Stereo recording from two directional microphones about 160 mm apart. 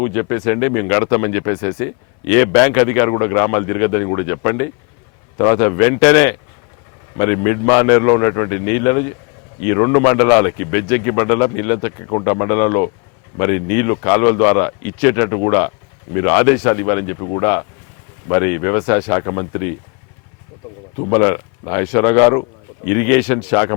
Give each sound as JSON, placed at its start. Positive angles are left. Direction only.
{"t": 0.0, "sound": "speech", "side_deg": 20}
{"t": 21.0, "sound": "speech", "side_deg": 15}